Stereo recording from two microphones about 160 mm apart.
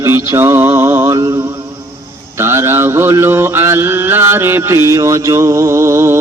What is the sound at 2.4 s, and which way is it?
Mantra, 15° right (ahead or behind).